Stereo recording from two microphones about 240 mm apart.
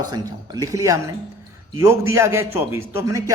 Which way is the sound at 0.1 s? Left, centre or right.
Centre.